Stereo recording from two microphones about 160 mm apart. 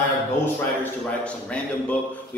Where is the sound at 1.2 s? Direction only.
10° left (ahead or behind).